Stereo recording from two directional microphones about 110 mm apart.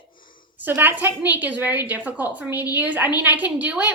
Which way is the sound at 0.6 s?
20° right (ahead or behind).